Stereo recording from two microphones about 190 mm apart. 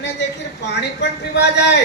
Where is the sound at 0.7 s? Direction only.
65° left (ahead or behind).